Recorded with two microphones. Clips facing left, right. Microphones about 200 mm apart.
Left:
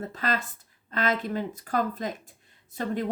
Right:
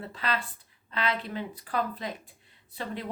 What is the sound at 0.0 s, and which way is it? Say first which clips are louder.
A woman's voice: left 3 dB; 45° left (ahead or behind).